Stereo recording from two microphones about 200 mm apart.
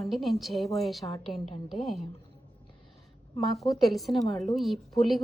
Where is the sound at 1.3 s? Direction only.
30° left (ahead or behind).